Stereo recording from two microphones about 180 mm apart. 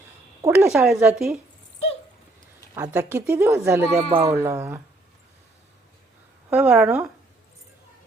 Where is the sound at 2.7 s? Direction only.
15° right (ahead or behind).